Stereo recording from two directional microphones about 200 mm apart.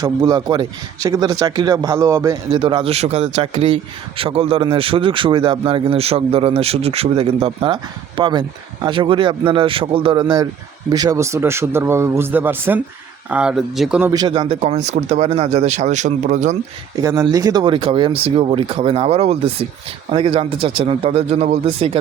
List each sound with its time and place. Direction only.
0.0 s speech: 20° right (ahead or behind); by 14.1 s 5° right (ahead or behind)
14.1 s speech: 20° right (ahead or behind); by 16.6 s 35° right (ahead or behind)
17.0 s speech: 15° right (ahead or behind)